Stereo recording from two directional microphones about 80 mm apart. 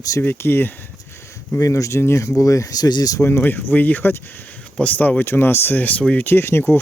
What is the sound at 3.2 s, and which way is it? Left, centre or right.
Speech, left.